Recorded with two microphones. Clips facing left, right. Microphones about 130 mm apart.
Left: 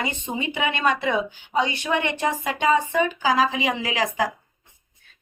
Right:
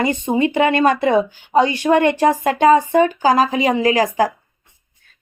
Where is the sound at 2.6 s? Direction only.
40° right (ahead or behind).